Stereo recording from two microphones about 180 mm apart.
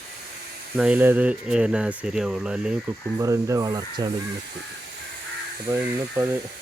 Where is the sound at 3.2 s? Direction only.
15° right (ahead or behind).